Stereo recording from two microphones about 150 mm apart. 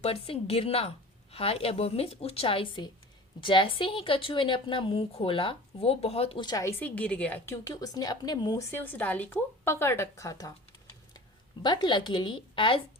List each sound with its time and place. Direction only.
0.0 s a woman's voice: 40° left (ahead or behind)
8.7 s a woman's voice: 15° left (ahead or behind)
11.6 s a woman's voice: 30° left (ahead or behind)